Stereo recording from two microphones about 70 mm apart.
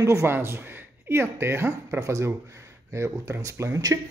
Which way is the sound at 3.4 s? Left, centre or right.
Right.